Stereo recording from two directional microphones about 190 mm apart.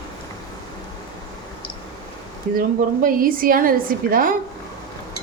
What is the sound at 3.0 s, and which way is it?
A woman's voice, 50° right (ahead or behind).